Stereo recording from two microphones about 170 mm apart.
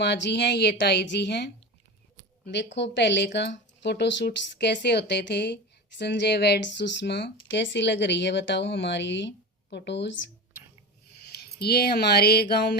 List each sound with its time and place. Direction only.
0.0 s speech: 90° left
2.5 s speech: 90° left
11.3 s speech: 70° left (ahead or behind)